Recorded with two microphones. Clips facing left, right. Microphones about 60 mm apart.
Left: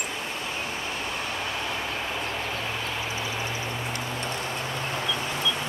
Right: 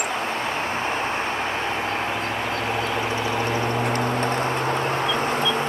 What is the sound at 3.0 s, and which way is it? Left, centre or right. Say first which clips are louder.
Vehicle: right 7 dB; right.